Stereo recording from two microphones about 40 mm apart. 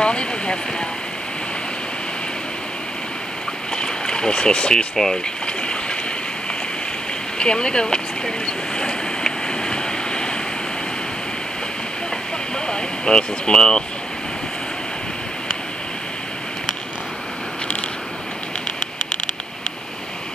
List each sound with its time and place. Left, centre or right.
0.0 s a sound: left
3.7 s boat: centre
4.9 s speech: centre
5.6 s stream: left
7.3 s vehicle: left
12.5 s speech: left